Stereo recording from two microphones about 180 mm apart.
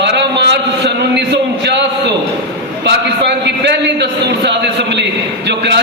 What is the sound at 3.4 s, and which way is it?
A man's voice, 70° right (ahead or behind).